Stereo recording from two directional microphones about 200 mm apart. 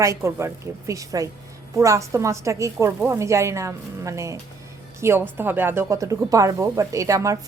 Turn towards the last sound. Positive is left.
turn(degrees=-15)  # may be behind; listen again after turning